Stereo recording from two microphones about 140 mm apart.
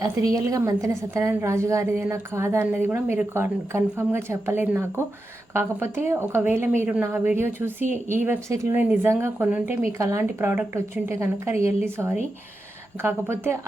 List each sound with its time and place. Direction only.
0.0 s a woman's voice: 25° right (ahead or behind)